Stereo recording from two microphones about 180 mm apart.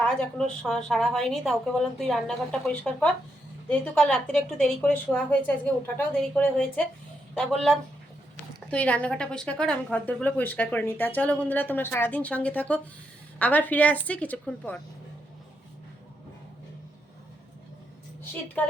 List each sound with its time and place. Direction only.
0.0 s a woman's voice: 5° left (ahead or behind)
18.6 s speech: 10° left (ahead or behind)